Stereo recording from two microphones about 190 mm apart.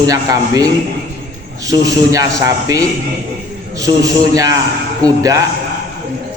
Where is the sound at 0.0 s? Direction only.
20° right (ahead or behind).